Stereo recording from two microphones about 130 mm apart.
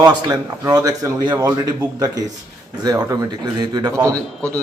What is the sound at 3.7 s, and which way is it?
Speech, 30° right (ahead or behind).